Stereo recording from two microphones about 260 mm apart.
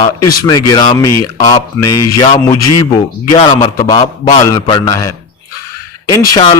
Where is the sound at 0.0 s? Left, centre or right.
Centre.